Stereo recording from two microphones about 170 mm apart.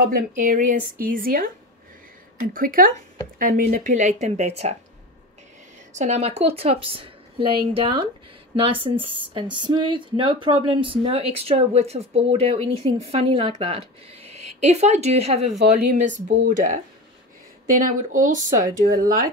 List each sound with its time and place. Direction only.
0.0 s speech: 55° right (ahead or behind); by 4.7 s 40° right (ahead or behind)
5.9 s speech: 40° right (ahead or behind)
9.1 s speech: 30° right (ahead or behind); by 19.2 s 55° right (ahead or behind)